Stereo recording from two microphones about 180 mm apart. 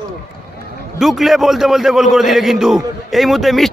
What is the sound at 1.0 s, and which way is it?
A man's voice, centre (ahead or behind).